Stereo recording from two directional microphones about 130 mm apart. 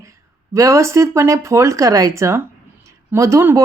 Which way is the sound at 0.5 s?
20° right (ahead or behind).